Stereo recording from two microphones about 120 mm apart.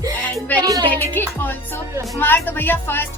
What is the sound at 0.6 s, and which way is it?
Speech, 30° right (ahead or behind).